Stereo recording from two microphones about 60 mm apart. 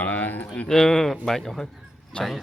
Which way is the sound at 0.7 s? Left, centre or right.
Centre.